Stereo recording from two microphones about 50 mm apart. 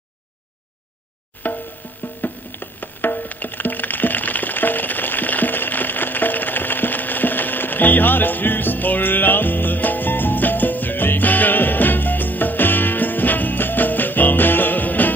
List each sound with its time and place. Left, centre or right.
1.4 s music: left